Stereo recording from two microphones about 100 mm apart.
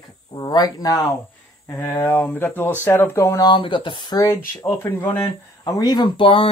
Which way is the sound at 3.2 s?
35° left (ahead or behind).